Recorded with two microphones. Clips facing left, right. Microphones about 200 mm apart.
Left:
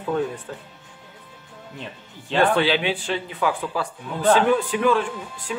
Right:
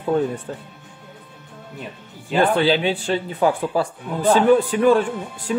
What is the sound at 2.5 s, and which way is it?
Speech, 40° right (ahead or behind).